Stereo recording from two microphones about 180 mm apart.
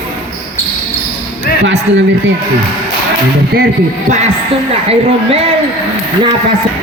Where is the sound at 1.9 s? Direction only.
10° right (ahead or behind).